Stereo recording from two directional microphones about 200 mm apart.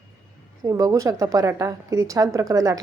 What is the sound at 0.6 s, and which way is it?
A woman's voice, 15° right (ahead or behind).